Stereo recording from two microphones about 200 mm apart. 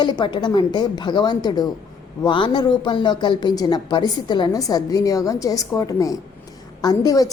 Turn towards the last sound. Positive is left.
turn(degrees=15)  # may be behind; listen again after turning